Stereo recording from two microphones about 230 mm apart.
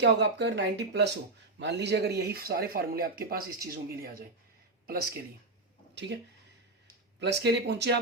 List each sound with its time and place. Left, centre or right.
0.0 s speech: right
7.2 s speech: right